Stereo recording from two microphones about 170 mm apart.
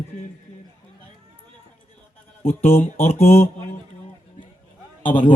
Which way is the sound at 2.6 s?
35° left (ahead or behind).